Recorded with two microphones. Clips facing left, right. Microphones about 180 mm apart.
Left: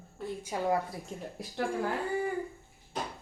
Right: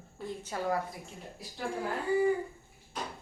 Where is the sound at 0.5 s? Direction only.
10° left (ahead or behind).